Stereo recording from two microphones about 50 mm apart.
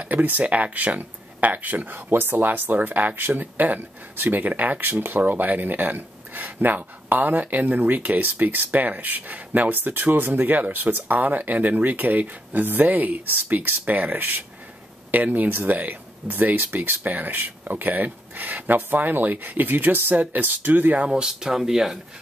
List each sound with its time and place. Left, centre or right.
0.0 s speech: right
21.0 s speech: centre